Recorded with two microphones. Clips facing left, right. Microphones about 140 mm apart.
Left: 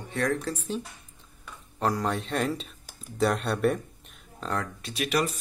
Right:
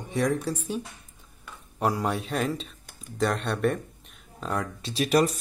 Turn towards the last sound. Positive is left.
turn(degrees=-40)  # may be behind; listen again after turning